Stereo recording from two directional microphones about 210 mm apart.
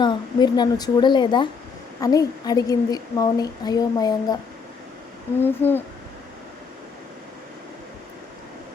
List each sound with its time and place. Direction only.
0.0 s a woman's voice: 20° left (ahead or behind)
5.4 s a woman's voice: 10° left (ahead or behind)